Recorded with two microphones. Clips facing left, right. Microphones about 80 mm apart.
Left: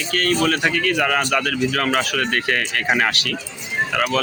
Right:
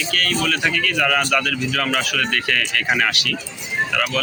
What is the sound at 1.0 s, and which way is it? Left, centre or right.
Speech, centre.